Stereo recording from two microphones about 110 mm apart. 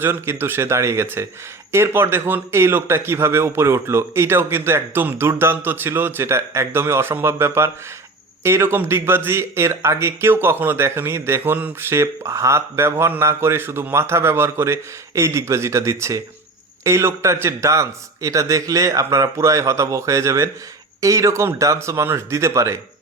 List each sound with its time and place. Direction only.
0.0 s speech: 20° right (ahead or behind)